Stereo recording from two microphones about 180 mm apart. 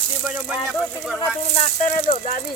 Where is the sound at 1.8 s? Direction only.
40° left (ahead or behind).